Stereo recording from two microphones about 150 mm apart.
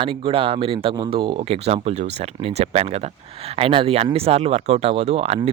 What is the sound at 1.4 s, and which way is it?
Speech, 45° right (ahead or behind).